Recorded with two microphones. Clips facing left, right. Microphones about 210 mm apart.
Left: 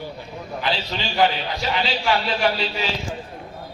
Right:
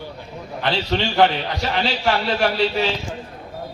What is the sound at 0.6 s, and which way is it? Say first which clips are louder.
Speech: right 5 dB; 70° right (ahead or behind).